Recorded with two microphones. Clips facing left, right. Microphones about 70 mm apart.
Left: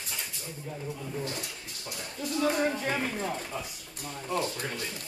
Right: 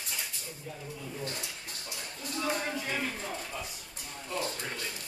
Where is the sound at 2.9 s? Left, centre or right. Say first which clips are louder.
Left 4 dB; left.